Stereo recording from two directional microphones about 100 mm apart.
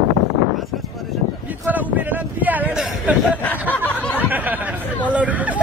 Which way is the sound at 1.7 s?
15° right (ahead or behind).